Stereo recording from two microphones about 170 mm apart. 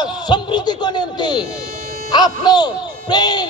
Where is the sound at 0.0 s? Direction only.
25° left (ahead or behind).